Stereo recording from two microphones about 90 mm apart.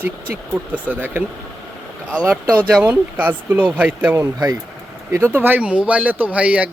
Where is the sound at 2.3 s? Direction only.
15° right (ahead or behind).